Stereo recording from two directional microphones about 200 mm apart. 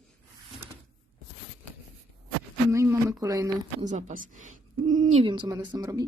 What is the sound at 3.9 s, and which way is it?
Speech, 35° right (ahead or behind).